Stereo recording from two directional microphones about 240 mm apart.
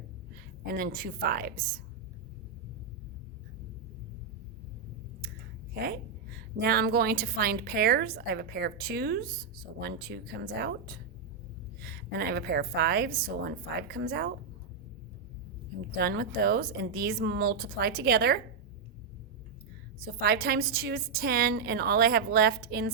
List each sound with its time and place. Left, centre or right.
0.6 s a woman's voice: right
5.7 s a woman's voice: right
15.9 s a woman's voice: right
20.0 s a woman's voice: right